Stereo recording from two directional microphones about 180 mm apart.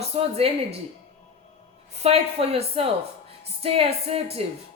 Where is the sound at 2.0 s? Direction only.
35° right (ahead or behind).